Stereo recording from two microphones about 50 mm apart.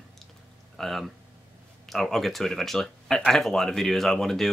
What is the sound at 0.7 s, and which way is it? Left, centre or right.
Speech, centre.